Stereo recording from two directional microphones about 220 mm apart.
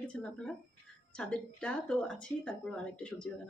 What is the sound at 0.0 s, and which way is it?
Speech, 5° left (ahead or behind).